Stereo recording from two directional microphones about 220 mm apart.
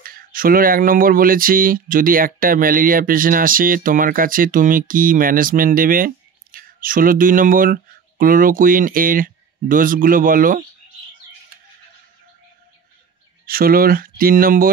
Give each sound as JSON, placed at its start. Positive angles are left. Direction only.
{"t": 0.0, "sound": "speech", "side_deg": -40}
{"t": 13.5, "sound": "speech", "side_deg": -40}